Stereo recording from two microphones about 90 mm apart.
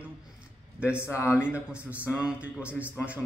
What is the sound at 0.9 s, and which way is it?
Speech, 30° left (ahead or behind).